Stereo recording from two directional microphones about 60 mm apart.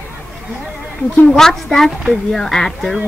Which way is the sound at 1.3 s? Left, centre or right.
Centre.